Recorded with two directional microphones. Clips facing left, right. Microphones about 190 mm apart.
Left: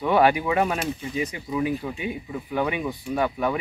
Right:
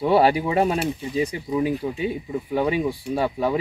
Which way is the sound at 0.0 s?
30° right (ahead or behind).